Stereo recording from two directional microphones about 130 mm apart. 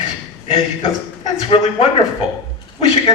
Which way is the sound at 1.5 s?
50° left (ahead or behind).